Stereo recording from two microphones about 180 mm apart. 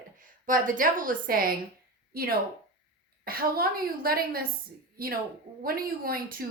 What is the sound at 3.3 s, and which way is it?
A woman's voice, 55° right (ahead or behind).